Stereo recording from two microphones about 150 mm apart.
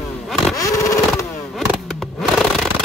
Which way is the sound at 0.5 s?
20° left (ahead or behind).